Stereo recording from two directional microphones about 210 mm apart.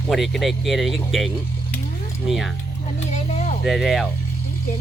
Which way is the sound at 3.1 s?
35° left (ahead or behind).